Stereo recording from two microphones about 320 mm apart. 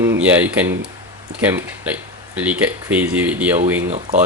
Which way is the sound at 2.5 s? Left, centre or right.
Centre.